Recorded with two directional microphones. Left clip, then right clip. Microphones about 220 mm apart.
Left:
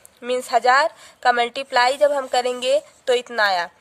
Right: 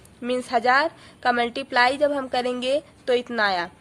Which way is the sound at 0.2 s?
35° left (ahead or behind).